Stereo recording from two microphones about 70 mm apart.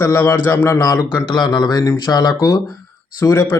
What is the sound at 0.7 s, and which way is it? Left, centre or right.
A man's voice, left.